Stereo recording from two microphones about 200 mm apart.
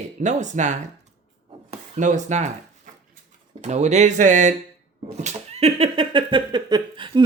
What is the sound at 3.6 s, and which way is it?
Speech, 35° right (ahead or behind).